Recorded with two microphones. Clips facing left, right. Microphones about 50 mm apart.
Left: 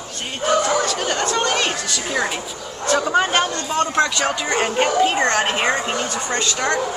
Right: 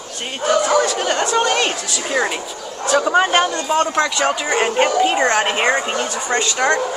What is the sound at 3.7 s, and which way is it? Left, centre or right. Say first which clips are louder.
Speech: right 2 dB; right.